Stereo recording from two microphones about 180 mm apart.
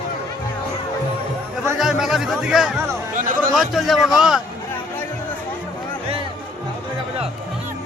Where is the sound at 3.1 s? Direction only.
45° right (ahead or behind).